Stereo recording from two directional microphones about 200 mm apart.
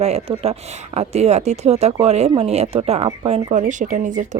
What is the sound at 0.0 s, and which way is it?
Speech, 30° right (ahead or behind).